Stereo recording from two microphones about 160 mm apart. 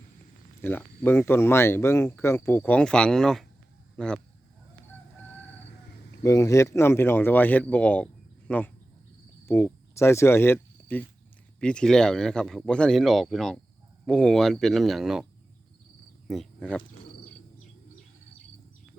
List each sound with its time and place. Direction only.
0.6 s speech: 10° left (ahead or behind)
6.2 s speech: 20° left (ahead or behind); by 15.3 s centre (ahead or behind)
16.3 s speech: centre (ahead or behind)